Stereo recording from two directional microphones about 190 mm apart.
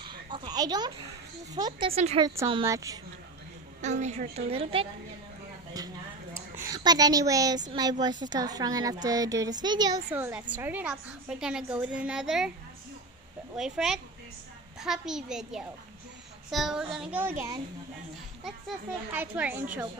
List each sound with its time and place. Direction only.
0.0 s a sound: 25° right (ahead or behind)
1.5 s speech: 25° right (ahead or behind)
2.6 s speech: 15° right (ahead or behind)
3.8 s a woman's voice: 40° right (ahead or behind)
5.7 s speech: 20° right (ahead or behind)
6.3 s a sound: 15° right (ahead or behind)
8.0 s speech: 20° right (ahead or behind)
10.1 s a woman's voice: 10° right (ahead or behind)
13.6 s a woman's voice: centre (ahead or behind)
19.1 s speech: 10° right (ahead or behind)